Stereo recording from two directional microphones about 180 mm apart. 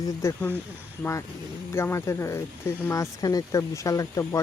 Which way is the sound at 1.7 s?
15° left (ahead or behind).